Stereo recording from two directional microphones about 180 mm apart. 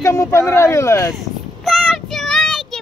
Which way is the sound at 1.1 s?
Centre (ahead or behind).